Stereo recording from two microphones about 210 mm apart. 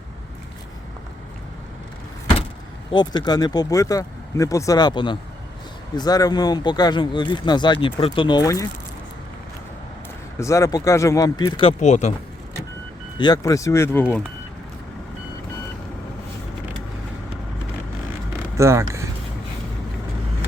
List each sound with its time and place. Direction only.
2.9 s speech: 20° left (ahead or behind)
10.4 s speech: 15° left (ahead or behind)
11.8 s speech: 35° left (ahead or behind)
13.1 s speech: 20° left (ahead or behind)
18.5 s speech: 15° right (ahead or behind)